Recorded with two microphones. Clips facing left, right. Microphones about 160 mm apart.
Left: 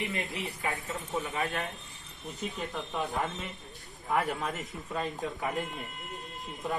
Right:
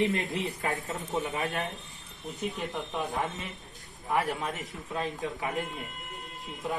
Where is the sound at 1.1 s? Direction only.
20° right (ahead or behind).